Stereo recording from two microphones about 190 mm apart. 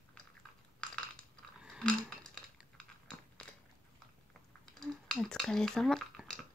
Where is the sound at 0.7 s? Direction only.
5° left (ahead or behind).